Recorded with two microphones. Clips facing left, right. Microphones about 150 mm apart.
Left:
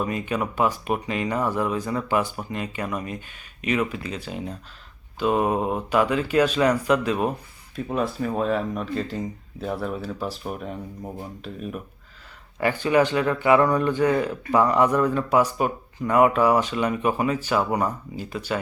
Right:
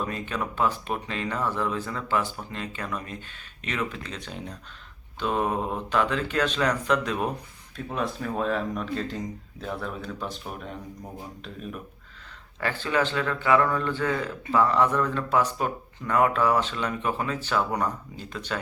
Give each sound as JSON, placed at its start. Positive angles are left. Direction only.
{"t": 0.0, "sound": "speech", "side_deg": 10}